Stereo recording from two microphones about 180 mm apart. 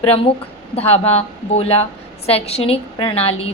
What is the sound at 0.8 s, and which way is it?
A woman's voice, 35° left (ahead or behind).